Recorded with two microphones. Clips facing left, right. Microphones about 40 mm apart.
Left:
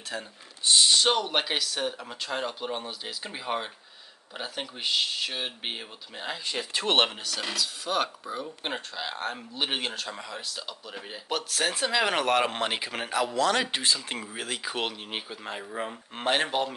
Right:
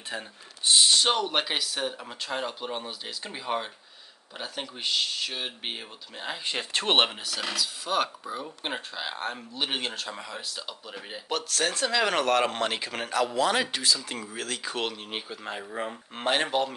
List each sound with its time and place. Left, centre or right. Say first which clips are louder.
0.1 s speech: left 1 dB; centre
6.4 s speech: right 2 dB; right
7.0 s speech: even; centre
13.3 s speech: left 1 dB; centre
13.7 s speech: even; left
14.3 s speech: even; centre